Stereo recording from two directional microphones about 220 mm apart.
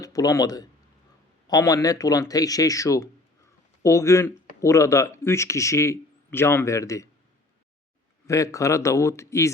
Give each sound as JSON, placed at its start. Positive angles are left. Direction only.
{"t": 0.0, "sound": "speech", "side_deg": 15}
{"t": 8.3, "sound": "speech", "side_deg": 15}